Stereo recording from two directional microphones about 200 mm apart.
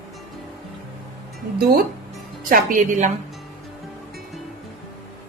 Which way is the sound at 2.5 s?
45° right (ahead or behind).